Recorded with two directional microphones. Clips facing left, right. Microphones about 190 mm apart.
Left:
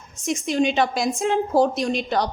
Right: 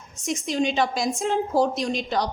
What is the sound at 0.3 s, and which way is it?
A woman's voice, 60° left (ahead or behind).